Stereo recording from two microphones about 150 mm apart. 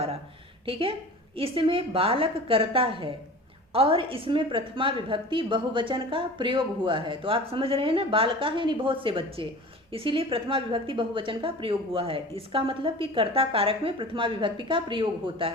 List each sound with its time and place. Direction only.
0.6 s a woman's voice: 35° right (ahead or behind)